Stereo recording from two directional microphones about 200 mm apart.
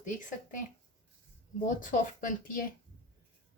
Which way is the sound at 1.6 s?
40° left (ahead or behind).